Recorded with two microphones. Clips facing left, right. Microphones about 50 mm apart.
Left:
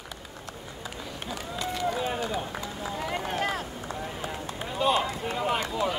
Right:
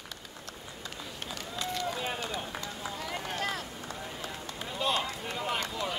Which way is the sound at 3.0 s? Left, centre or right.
Left.